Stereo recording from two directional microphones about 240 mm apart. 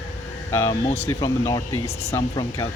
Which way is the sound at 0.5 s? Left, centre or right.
Centre.